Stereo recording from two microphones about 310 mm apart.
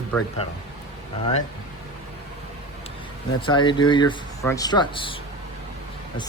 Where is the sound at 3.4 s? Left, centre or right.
Centre.